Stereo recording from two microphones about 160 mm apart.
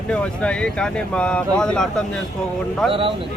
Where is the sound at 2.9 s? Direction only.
35° right (ahead or behind).